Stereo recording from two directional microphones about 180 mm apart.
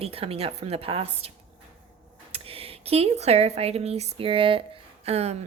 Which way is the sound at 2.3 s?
30° right (ahead or behind).